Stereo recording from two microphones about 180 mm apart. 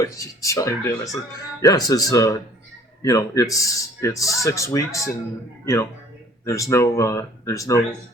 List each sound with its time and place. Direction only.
0.0 s speech: 20° left (ahead or behind)
6.4 s speech: 15° left (ahead or behind)